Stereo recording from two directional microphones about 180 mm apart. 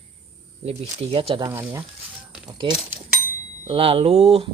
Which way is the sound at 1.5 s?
15° right (ahead or behind).